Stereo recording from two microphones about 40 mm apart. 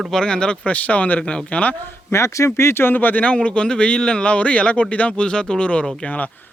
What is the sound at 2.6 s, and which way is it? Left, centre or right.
Speech, left.